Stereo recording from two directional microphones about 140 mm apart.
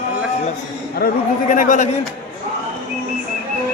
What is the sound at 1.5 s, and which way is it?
Speech, 65° left (ahead or behind).